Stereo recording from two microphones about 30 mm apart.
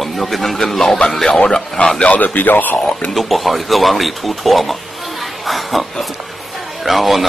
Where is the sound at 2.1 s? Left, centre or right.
Left.